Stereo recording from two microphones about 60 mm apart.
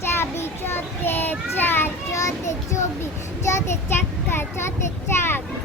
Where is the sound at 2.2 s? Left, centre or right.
Left.